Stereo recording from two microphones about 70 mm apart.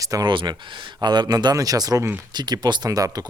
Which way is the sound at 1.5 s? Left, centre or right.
Right.